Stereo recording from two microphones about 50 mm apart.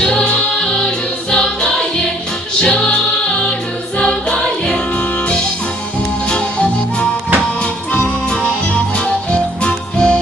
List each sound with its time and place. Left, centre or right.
0.0 s music: centre
6.3 s music: left
9.3 s music: left